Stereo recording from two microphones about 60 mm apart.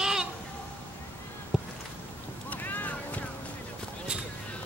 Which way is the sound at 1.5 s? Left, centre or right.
Centre.